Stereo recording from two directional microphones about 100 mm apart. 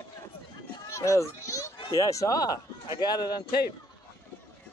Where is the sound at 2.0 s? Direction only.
35° left (ahead or behind).